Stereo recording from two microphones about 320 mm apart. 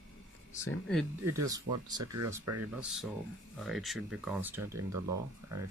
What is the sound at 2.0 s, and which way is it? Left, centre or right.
Speech, right.